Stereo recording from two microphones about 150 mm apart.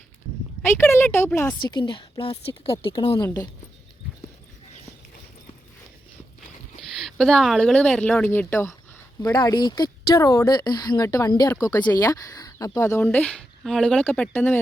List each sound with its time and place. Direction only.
0.6 s speech: 15° left (ahead or behind)
1.9 s a woman's voice: 35° left (ahead or behind)
3.2 s speech: 20° left (ahead or behind)
7.0 s speech: centre (ahead or behind)
9.2 s speech: 30° left (ahead or behind); by 14.6 s 10° left (ahead or behind)